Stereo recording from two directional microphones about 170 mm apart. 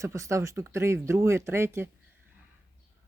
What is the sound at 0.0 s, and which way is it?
Speech, 15° right (ahead or behind).